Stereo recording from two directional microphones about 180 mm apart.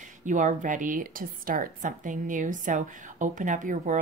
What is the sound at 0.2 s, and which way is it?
A woman's voice, 45° right (ahead or behind).